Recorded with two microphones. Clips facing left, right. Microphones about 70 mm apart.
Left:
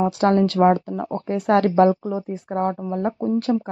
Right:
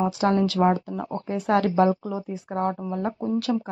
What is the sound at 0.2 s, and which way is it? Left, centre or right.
A woman's voice, left.